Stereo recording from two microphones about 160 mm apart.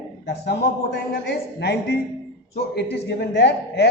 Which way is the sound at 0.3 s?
90° left.